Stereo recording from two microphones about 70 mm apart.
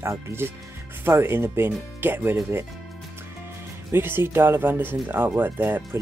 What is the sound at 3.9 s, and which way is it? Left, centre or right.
Speech, right.